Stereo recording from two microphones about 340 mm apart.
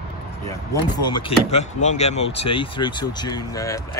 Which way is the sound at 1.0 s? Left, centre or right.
Centre.